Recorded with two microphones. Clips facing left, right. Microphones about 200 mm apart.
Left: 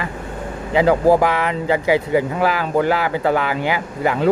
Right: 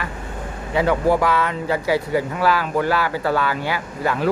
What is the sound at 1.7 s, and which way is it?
Speech, 20° left (ahead or behind).